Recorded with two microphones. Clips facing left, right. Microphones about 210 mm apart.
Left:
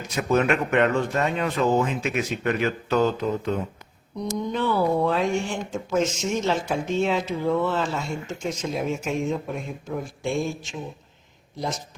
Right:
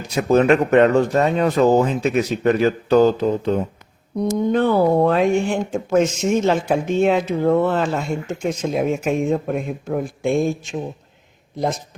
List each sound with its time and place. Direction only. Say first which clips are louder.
0.1 s speech: right 7 dB; 30° right (ahead or behind)
4.2 s speech: right 8 dB; 55° right (ahead or behind)